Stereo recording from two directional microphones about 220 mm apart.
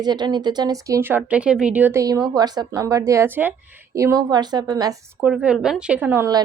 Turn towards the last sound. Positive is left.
turn(degrees=-10)  # may be behind; listen again after turning